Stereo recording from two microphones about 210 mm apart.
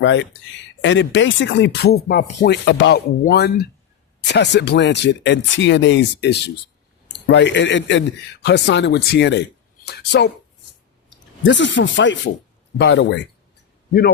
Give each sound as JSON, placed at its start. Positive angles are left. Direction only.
{"t": 0.0, "sound": "speech", "side_deg": 60}
{"t": 11.4, "sound": "speech", "side_deg": 60}